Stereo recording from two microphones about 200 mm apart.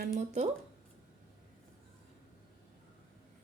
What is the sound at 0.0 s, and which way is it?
Speech, 40° right (ahead or behind).